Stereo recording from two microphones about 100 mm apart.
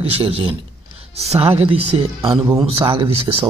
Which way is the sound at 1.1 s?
90° right.